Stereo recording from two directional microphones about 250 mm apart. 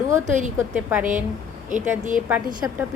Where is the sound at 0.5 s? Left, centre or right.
Centre.